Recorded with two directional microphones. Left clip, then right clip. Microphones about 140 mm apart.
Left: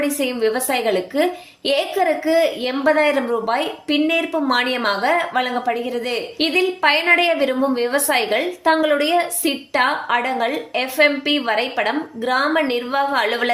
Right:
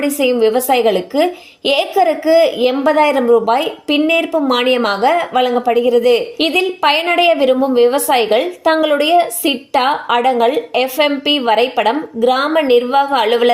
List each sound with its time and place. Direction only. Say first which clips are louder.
0.0 s a woman's voice: right 7 dB; 35° right (ahead or behind)